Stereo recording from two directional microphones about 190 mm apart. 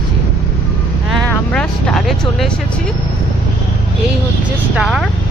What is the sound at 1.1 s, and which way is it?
Speech, 5° left (ahead or behind).